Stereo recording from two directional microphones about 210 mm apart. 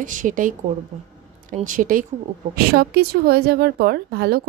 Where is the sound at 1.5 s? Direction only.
40° right (ahead or behind).